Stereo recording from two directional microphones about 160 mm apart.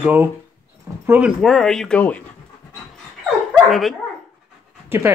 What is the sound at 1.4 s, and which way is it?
Speech, centre (ahead or behind).